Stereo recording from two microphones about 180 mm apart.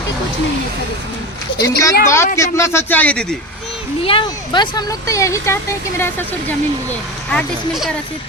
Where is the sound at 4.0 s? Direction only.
30° left (ahead or behind); by 6.5 s 15° left (ahead or behind).